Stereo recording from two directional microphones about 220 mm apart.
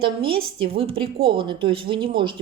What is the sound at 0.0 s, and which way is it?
Speech, 25° right (ahead or behind).